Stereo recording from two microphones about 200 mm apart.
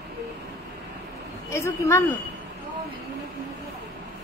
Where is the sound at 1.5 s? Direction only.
15° left (ahead or behind).